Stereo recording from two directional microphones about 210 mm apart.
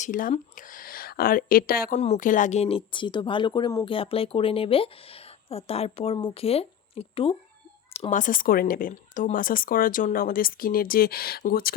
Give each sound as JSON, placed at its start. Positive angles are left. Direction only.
{"t": 0.0, "sound": "speech", "side_deg": 40}
{"t": 2.0, "sound": "speech", "side_deg": 35}